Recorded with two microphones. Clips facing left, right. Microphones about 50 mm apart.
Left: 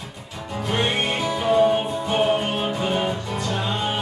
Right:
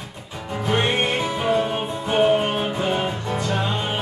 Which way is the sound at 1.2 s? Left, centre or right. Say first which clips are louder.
Left 3 dB; centre.